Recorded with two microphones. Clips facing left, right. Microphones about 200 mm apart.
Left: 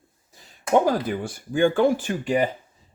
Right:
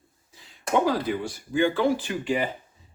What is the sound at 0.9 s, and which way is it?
Speech, 50° left (ahead or behind).